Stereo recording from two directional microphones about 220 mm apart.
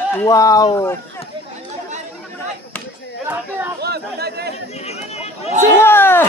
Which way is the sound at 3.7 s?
45° right (ahead or behind).